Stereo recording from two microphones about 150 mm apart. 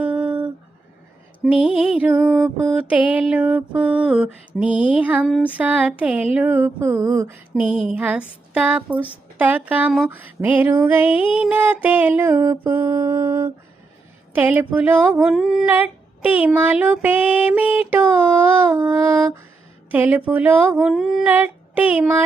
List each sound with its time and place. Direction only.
0.0 s a sound: 10° right (ahead or behind)
1.4 s mantra: centre (ahead or behind)
1.8 s child singing: 5° right (ahead or behind)
2.2 s mantra: centre (ahead or behind)
3.0 s child singing: 10° right (ahead or behind)
5.2 s mantra: 5° left (ahead or behind)
5.5 s child singing: 10° right (ahead or behind)